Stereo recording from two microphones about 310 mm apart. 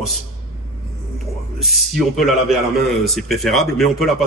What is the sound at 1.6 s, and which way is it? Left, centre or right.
Speech, centre.